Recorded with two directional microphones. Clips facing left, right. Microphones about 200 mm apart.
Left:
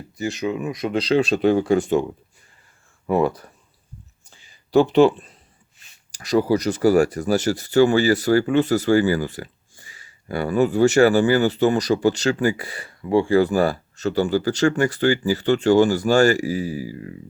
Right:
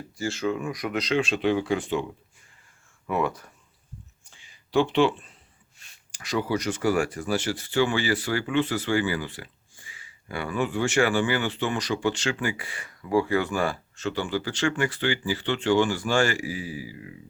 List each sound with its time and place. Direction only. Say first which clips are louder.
0.2 s speech: left 3 dB; 20° left (ahead or behind); by 2.0 s 45° left (ahead or behind)
3.1 s speech: left 7 dB; 35° left (ahead or behind)
4.3 s a sound: left 8 dB; 35° left (ahead or behind)
6.1 s speech: left 8 dB; 40° left (ahead or behind)